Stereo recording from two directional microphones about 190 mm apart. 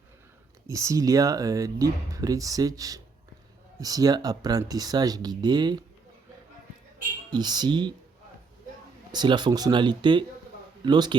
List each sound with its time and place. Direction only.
0.7 s speech: 15° right (ahead or behind)
7.3 s speech: 20° right (ahead or behind)
9.1 s speech: 25° right (ahead or behind)